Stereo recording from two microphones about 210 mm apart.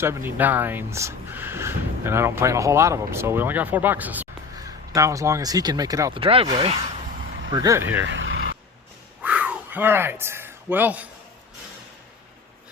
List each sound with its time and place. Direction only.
0.0 s speech: 10° right (ahead or behind); by 6.8 s 25° right (ahead or behind)
7.5 s speech: 15° right (ahead or behind)
8.0 s vehicle: 65° right (ahead or behind)
9.2 s a sound: 5° right (ahead or behind)